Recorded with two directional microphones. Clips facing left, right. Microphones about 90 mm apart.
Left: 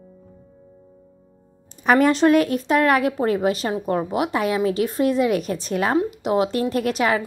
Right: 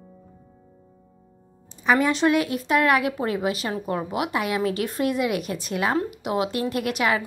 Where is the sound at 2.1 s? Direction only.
40° left (ahead or behind).